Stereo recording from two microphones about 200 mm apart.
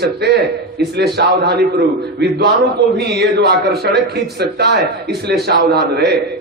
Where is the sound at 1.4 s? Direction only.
55° right (ahead or behind).